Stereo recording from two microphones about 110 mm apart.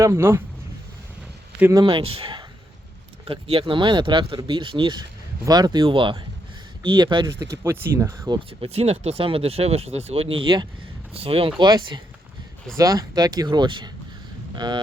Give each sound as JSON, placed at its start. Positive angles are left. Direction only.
{"t": 0.0, "sound": "speech", "side_deg": -25}
{"t": 1.7, "sound": "speech", "side_deg": -50}
{"t": 7.3, "sound": "speech", "side_deg": -30}
{"t": 8.4, "sound": "speech", "side_deg": -60}
{"t": 11.1, "sound": "speech", "side_deg": -60}
{"t": 11.6, "sound": "speech", "side_deg": -40}
{"t": 12.7, "sound": "speech", "side_deg": -30}